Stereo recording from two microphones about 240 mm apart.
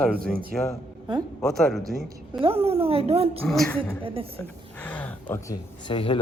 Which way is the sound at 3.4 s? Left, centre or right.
Centre.